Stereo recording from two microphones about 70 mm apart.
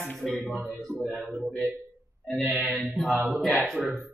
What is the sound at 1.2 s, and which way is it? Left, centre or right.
Speech, centre.